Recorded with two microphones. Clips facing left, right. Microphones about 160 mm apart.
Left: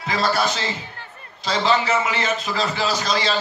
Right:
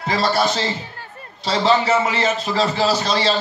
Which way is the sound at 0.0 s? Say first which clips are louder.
Right 2 dB; 35° right (ahead or behind).